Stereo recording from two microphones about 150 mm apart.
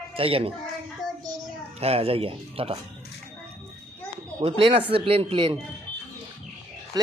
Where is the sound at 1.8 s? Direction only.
40° right (ahead or behind).